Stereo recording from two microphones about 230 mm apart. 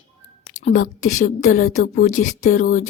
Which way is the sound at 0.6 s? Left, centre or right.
Left.